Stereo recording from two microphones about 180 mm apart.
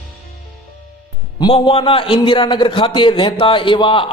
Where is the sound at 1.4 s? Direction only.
30° left (ahead or behind).